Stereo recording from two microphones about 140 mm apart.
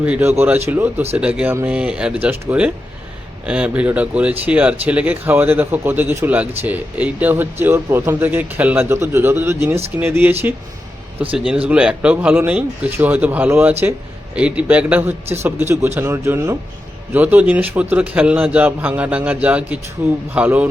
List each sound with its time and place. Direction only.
0.0 s speech: 10° right (ahead or behind)